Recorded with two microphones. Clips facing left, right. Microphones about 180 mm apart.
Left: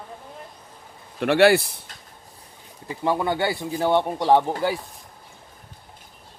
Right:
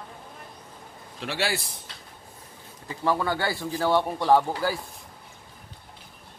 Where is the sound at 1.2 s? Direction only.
60° left (ahead or behind).